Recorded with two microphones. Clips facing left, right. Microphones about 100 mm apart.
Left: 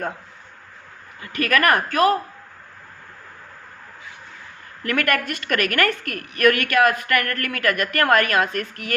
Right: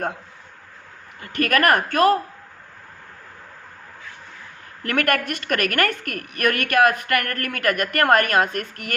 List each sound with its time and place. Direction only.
1.2 s a woman's voice: 50° right (ahead or behind)
4.8 s a woman's voice: 45° right (ahead or behind)
5.9 s a woman's voice: 35° left (ahead or behind)
6.4 s a woman's voice: 45° right (ahead or behind)